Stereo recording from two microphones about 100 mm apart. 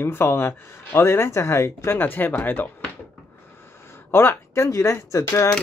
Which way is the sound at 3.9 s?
25° left (ahead or behind).